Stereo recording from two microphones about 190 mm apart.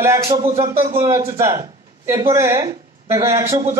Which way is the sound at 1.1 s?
15° right (ahead or behind).